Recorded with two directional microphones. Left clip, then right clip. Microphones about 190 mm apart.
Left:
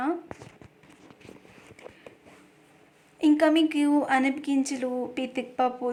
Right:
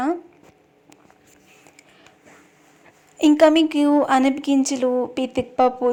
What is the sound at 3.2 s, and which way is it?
A woman's voice, 35° right (ahead or behind).